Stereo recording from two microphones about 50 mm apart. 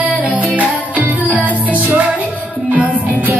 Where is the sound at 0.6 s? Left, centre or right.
Right.